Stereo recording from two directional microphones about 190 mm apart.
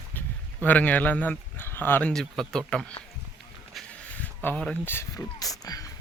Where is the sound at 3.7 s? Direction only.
Centre (ahead or behind).